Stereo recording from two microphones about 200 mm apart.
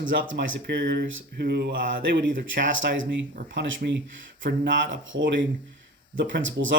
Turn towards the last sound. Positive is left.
turn(degrees=-70)  # may be behind; listen again after turning